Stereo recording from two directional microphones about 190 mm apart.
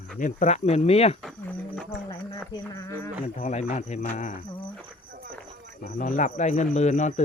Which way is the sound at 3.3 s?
40° left (ahead or behind).